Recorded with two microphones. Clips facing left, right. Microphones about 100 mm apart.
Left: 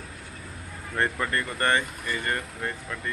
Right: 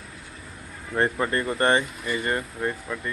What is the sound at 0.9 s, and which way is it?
Speech, 20° right (ahead or behind).